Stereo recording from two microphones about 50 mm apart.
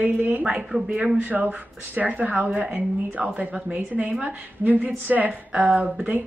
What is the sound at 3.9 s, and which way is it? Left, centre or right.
A woman's voice, right.